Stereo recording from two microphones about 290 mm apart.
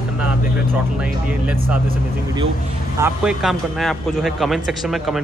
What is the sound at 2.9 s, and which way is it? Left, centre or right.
Speech, centre.